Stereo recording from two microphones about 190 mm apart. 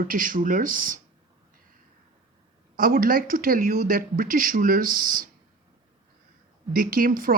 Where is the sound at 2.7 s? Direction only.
50° right (ahead or behind).